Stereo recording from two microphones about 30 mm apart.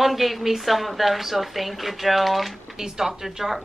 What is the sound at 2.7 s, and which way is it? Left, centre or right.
Speech, centre.